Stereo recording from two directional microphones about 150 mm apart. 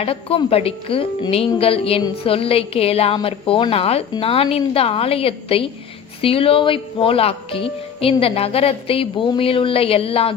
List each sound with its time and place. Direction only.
0.0 s speech: 40° left (ahead or behind)